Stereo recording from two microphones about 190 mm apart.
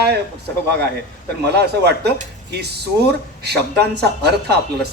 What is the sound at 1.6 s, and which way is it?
Speech, 60° right (ahead or behind).